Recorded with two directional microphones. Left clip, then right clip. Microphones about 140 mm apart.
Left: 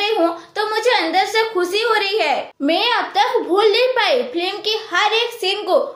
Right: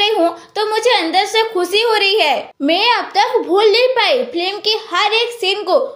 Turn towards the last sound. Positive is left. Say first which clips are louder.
# right 3 dB
turn(degrees=-40)  # may be behind; listen again after turning